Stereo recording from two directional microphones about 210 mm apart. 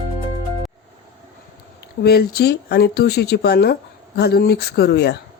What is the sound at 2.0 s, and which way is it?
A woman's voice, 50° left (ahead or behind).